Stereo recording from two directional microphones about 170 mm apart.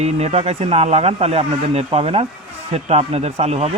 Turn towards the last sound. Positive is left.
turn(degrees=-40)  # may be behind; listen again after turning